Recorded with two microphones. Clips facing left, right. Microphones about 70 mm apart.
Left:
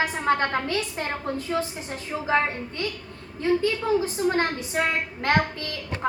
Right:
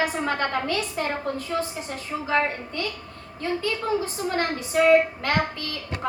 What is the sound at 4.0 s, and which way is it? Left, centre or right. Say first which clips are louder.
A woman's voice: left 3 dB; left.